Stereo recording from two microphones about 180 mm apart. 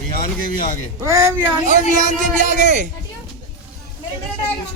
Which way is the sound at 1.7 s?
45° right (ahead or behind).